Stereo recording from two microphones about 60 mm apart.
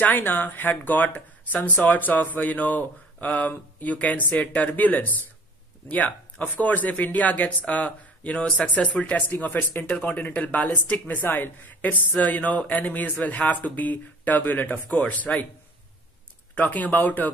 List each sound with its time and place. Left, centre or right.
0.0 s speech: left
16.5 s speech: left